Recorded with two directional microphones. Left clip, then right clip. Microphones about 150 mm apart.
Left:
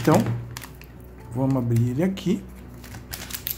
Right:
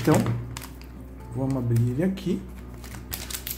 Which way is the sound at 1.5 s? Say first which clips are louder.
Left 3 dB; 25° left (ahead or behind).